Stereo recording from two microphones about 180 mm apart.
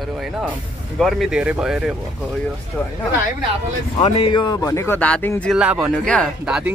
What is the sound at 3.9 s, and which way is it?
Speech, 25° left (ahead or behind).